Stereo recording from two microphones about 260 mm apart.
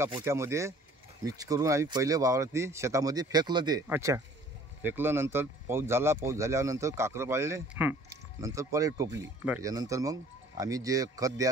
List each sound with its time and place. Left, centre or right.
0.0 s speech: centre